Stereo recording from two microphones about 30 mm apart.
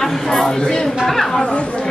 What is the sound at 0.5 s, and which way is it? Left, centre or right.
Speech, left.